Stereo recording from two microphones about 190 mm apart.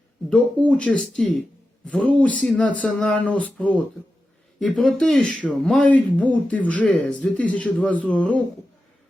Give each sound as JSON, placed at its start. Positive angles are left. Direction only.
{"t": 0.3, "sound": "speech", "side_deg": 5}